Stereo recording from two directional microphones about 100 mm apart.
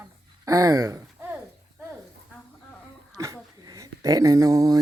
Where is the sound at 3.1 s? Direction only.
35° right (ahead or behind).